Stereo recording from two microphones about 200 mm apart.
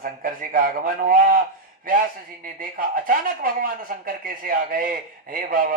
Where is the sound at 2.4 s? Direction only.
45° right (ahead or behind).